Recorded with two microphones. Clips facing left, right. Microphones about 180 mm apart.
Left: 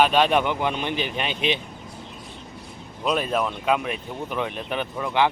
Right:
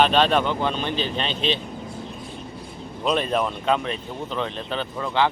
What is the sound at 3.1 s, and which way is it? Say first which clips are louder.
Speech: right 1 dB; 5° left (ahead or behind).